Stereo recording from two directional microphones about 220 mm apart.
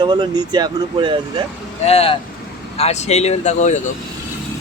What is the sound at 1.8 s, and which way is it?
Speech, 25° left (ahead or behind).